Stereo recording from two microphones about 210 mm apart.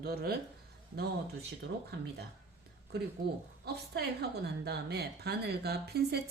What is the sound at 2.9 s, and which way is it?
Speech, 50° right (ahead or behind).